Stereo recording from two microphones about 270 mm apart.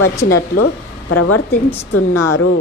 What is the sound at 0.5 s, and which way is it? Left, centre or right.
Speech, left.